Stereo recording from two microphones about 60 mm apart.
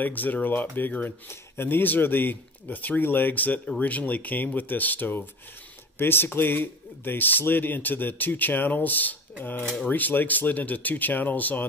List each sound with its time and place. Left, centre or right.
0.0 s speech: left